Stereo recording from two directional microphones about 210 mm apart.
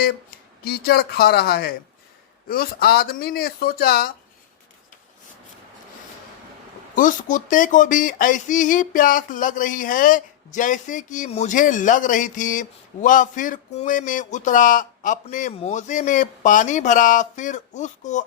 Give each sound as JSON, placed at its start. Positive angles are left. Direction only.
{"t": 0.0, "sound": "speech", "side_deg": 45}
{"t": 6.9, "sound": "speech", "side_deg": 40}